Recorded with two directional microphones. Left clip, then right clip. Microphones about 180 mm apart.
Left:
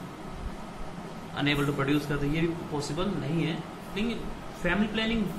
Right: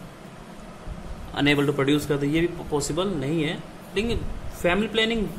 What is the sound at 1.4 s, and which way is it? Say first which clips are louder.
A man's voice: right 6 dB; 50° right (ahead or behind).